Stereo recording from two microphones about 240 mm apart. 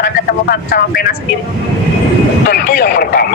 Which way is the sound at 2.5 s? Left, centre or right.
Left.